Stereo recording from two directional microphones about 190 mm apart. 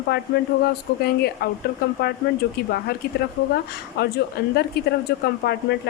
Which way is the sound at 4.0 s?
60° left (ahead or behind).